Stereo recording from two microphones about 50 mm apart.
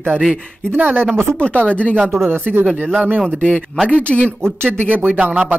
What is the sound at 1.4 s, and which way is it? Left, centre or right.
Speech, left.